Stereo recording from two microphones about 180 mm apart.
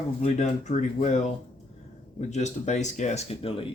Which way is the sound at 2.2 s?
40° left (ahead or behind).